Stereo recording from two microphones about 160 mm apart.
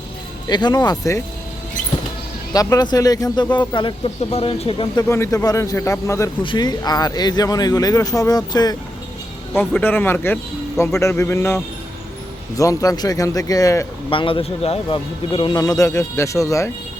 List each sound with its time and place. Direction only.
0.4 s a man's voice: 25° left (ahead or behind)
2.5 s a man's voice: 25° left (ahead or behind)
5.0 s a man's voice: 15° left (ahead or behind)
9.6 s a man's voice: 10° left (ahead or behind)
14.1 s a man's voice: 35° left (ahead or behind)